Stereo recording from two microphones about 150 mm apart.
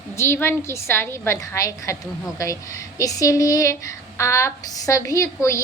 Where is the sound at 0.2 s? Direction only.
15° left (ahead or behind).